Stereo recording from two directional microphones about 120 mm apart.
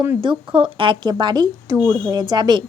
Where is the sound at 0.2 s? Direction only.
45° right (ahead or behind).